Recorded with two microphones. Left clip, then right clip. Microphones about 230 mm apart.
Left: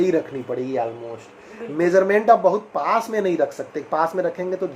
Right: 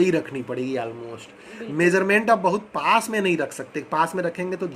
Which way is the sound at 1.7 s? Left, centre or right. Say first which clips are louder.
Left 2 dB; right.